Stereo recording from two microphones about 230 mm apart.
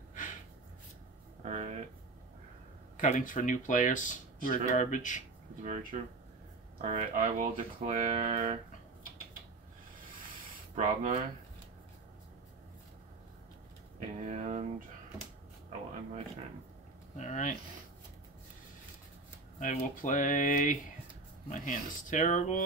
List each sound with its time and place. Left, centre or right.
1.4 s a sound: right
3.0 s speech: left
5.6 s speech: right
10.7 s speech: right
13.9 s a sound: right
17.2 s speech: left
19.6 s speech: left